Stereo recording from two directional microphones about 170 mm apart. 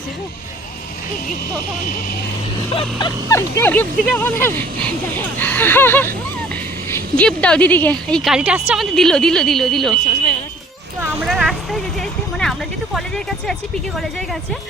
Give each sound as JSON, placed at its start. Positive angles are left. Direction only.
{"t": 2.7, "sound": "speech", "side_deg": 25}
{"t": 8.2, "sound": "speech", "side_deg": -5}
{"t": 11.3, "sound": "speech", "side_deg": 0}